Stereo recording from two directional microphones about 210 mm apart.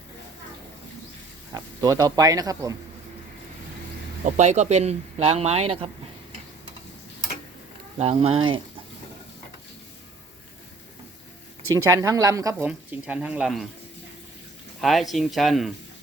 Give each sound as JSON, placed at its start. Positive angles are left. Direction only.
{"t": 1.5, "sound": "speech", "side_deg": -15}
{"t": 4.4, "sound": "speech", "side_deg": -35}
{"t": 7.9, "sound": "speech", "side_deg": -25}
{"t": 11.7, "sound": "speech", "side_deg": -15}
{"t": 14.8, "sound": "speech", "side_deg": 0}